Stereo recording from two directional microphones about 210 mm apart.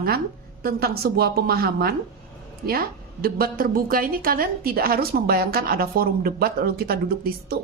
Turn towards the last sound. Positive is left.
turn(degrees=-45)  # may be behind; listen again after turning